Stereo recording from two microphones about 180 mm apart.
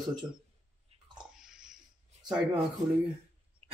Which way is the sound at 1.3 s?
5° right (ahead or behind).